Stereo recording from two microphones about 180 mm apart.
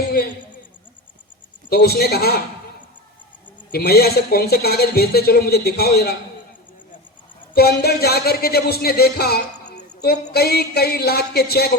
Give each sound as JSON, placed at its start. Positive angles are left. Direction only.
{"t": 1.7, "sound": "music", "side_deg": 60}
{"t": 3.7, "sound": "music", "side_deg": 60}
{"t": 7.5, "sound": "music", "side_deg": 60}